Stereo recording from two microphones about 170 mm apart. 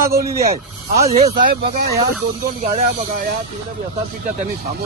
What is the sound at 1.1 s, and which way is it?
Speech, 35° right (ahead or behind).